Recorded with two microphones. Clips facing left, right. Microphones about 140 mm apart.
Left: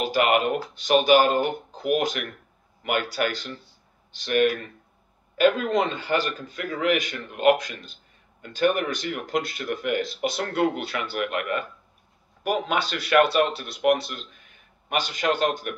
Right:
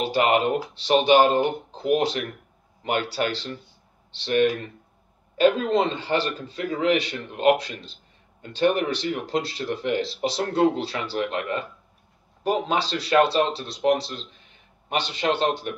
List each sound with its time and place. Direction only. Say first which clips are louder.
0.0 s a man's voice: right 1 dB; 30° right (ahead or behind)